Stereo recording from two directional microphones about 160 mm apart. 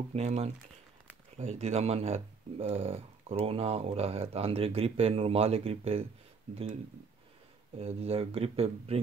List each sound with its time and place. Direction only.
0.1 s speech: 40° right (ahead or behind)